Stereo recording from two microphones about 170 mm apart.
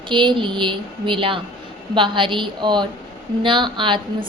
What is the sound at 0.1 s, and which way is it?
A woman's voice, 30° right (ahead or behind).